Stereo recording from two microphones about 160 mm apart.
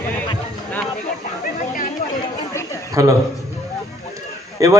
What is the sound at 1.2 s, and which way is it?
Chatter, 60° left (ahead or behind).